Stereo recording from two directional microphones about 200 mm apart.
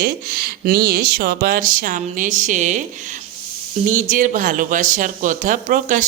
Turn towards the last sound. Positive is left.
turn(degrees=-40)  # may be behind; listen again after turning